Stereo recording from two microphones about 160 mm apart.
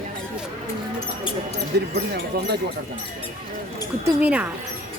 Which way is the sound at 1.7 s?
90° right.